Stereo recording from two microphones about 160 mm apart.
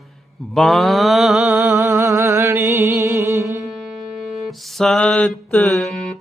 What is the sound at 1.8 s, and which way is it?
Music, 20° right (ahead or behind).